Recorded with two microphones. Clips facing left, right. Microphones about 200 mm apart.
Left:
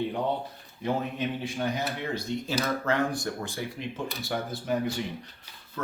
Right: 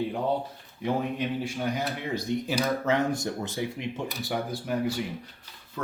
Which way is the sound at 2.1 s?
15° right (ahead or behind).